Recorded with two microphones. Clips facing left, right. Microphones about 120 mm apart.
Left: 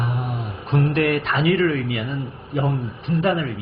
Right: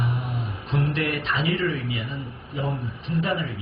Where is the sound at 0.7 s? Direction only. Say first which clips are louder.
Left 6 dB; 55° left (ahead or behind).